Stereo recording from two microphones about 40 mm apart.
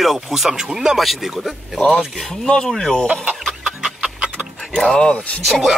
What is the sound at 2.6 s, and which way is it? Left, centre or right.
Speech, centre.